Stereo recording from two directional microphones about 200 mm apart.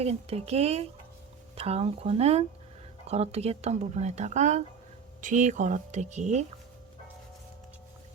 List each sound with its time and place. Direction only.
0.0 s speech: 30° right (ahead or behind)